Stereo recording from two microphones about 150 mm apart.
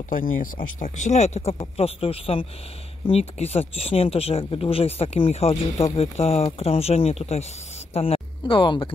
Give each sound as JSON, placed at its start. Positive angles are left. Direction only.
{"t": 0.1, "sound": "speech", "side_deg": 70}